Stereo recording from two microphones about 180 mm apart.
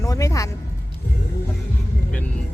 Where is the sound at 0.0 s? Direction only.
20° left (ahead or behind).